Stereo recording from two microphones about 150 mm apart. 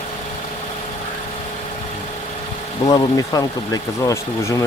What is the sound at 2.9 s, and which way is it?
Speech, 25° left (ahead or behind).